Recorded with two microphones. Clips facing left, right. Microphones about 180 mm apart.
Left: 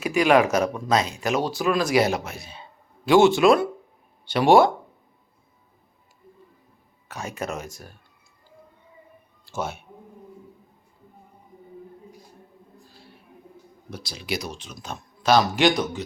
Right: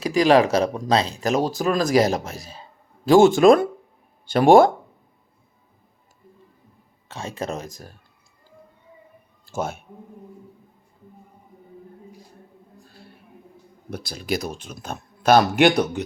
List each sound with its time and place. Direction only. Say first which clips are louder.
0.0 s speech: right 2 dB; 35° right (ahead or behind)
7.1 s speech: right 2 dB; 30° right (ahead or behind)
9.5 s speech: right 3 dB; 50° right (ahead or behind)
13.9 s speech: right 4 dB; 50° right (ahead or behind)